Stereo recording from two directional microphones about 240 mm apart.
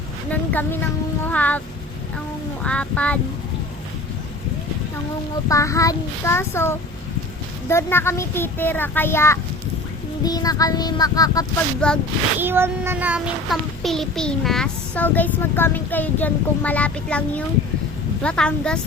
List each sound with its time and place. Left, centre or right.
0.3 s a child's voice: centre
2.6 s child singing: centre
5.5 s a child's voice: centre
11.8 s child singing: centre
12.4 s child singing: centre